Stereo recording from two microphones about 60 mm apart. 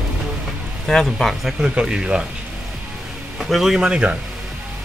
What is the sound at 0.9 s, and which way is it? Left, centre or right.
Speech, centre.